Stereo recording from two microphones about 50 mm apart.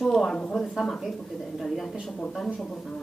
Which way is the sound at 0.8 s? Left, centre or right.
Centre.